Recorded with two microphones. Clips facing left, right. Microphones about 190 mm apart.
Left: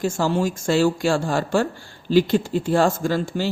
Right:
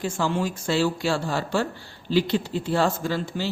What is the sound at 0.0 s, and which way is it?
A man's voice, 40° left (ahead or behind).